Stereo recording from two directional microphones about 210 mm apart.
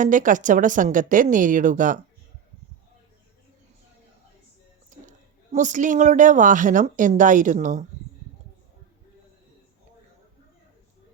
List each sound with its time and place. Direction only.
0.0 s a woman's voice: 40° right (ahead or behind)
4.9 s a woman's voice: 35° right (ahead or behind)